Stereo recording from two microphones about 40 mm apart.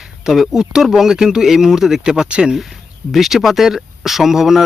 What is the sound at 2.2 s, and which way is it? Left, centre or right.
Speech, right.